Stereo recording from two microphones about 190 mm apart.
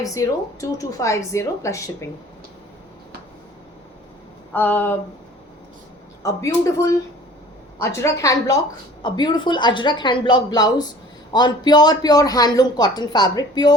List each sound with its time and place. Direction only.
0.0 s a woman's voice: 15° left (ahead or behind)
4.5 s a woman's voice: 10° left (ahead or behind)
6.2 s a woman's voice: 15° left (ahead or behind)